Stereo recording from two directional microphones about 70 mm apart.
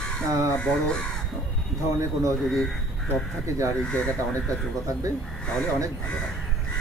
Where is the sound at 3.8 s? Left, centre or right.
Centre.